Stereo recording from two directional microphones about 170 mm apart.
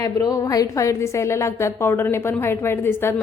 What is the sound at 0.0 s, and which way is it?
A woman's voice, 20° left (ahead or behind).